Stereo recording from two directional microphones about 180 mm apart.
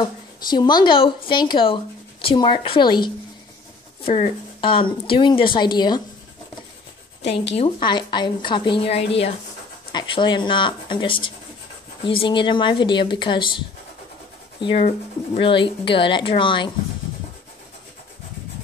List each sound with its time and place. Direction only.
0.0 s speech: 25° left (ahead or behind)
7.2 s a woman's voice: 70° left (ahead or behind)
7.5 s speech: 25° left (ahead or behind)
14.6 s speech: 30° left (ahead or behind)